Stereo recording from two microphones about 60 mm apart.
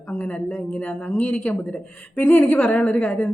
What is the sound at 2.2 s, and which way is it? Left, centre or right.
Speech, left.